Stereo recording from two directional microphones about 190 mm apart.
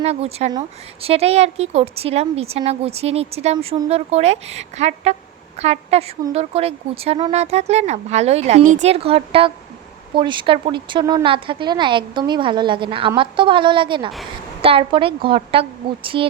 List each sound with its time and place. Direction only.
0.0 s speech: 35° right (ahead or behind)